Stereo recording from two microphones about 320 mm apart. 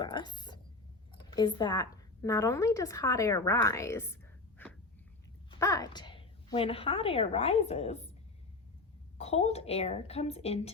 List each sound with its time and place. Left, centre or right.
0.0 s a woman's voice: centre
9.1 s a woman's voice: centre